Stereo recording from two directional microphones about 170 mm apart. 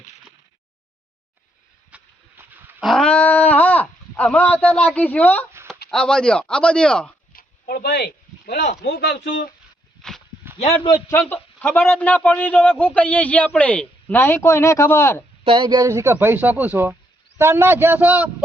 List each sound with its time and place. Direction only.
1.9 s a sound: 5° right (ahead or behind)
2.8 s speech: centre (ahead or behind)
7.3 s speech: 60° left (ahead or behind); by 9.3 s 80° left
10.0 s a sound: 5° left (ahead or behind)
11.1 s a man's voice: 10° left (ahead or behind)
15.4 s speech: 30° right (ahead or behind); by 18.4 s 10° right (ahead or behind)